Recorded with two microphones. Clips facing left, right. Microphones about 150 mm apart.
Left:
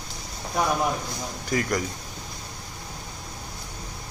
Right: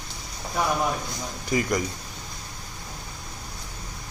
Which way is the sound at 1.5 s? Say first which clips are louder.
Right 1 dB; 10° right (ahead or behind).